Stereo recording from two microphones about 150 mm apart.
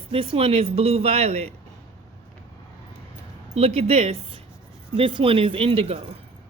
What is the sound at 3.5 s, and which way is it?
A woman's voice, 45° right (ahead or behind).